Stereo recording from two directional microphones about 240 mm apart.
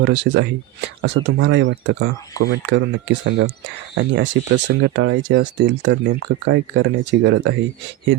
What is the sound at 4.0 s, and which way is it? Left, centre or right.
Speech, right.